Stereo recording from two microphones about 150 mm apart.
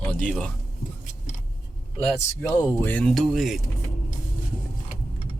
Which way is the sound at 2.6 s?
15° left (ahead or behind).